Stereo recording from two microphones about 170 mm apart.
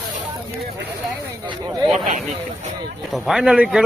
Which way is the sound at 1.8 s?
Centre (ahead or behind).